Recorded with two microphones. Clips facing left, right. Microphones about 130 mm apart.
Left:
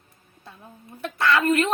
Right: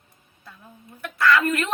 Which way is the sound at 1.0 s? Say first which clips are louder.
Right 1 dB; 25° left (ahead or behind).